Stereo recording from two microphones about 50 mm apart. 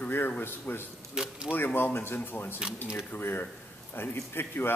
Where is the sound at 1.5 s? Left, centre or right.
Left.